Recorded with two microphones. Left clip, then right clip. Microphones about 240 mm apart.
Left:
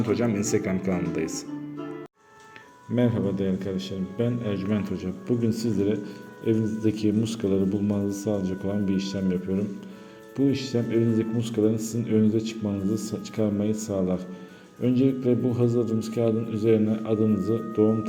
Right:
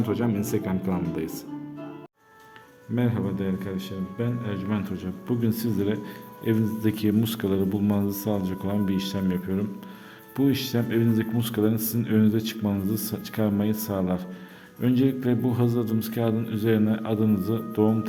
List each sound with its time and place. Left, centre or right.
0.0 s speech: centre
2.9 s a man's voice: centre
10.3 s a man's voice: right